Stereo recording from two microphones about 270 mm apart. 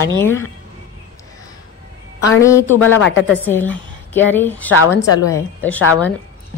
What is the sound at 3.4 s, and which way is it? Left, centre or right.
A woman's voice, centre.